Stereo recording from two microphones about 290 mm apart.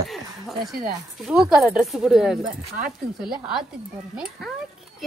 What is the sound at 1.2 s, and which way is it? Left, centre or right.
Speech, centre.